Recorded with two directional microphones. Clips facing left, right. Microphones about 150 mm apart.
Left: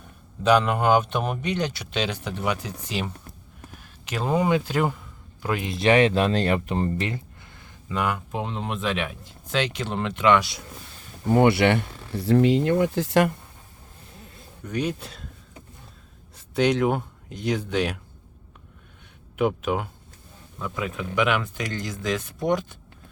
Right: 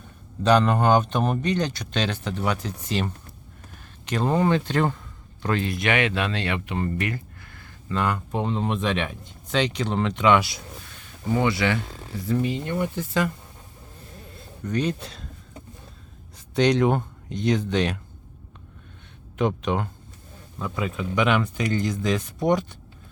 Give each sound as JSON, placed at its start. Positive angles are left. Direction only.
{"t": 0.4, "sound": "a man's voice", "side_deg": 5}
{"t": 5.7, "sound": "speech", "side_deg": 35}
{"t": 6.8, "sound": "speech", "side_deg": 25}
{"t": 11.3, "sound": "speech", "side_deg": 60}
{"t": 14.6, "sound": "speech", "side_deg": 10}
{"t": 16.6, "sound": "speech", "side_deg": 5}
{"t": 19.4, "sound": "speech", "side_deg": 5}